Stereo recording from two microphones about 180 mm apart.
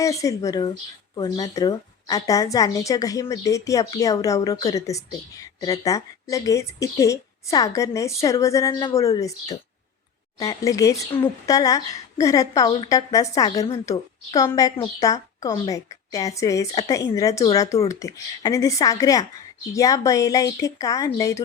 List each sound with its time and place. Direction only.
0.0 s a woman's voice: 15° left (ahead or behind)